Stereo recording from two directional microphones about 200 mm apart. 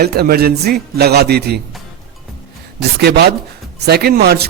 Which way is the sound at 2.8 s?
55° right (ahead or behind).